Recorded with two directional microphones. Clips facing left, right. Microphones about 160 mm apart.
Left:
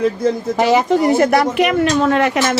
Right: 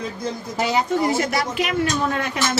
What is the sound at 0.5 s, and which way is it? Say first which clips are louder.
Speech: left 6 dB; 80° left.